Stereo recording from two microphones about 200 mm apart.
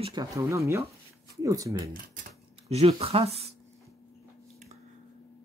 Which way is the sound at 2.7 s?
30° right (ahead or behind).